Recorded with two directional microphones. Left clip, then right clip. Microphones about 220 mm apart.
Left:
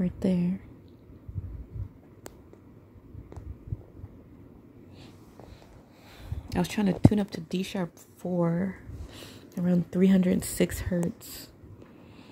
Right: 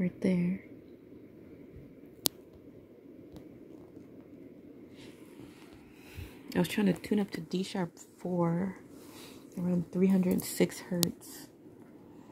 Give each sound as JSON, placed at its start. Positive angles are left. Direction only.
{"t": 0.0, "sound": "speech", "side_deg": 5}
{"t": 6.5, "sound": "a woman's voice", "side_deg": 5}
{"t": 10.4, "sound": "speech", "side_deg": 0}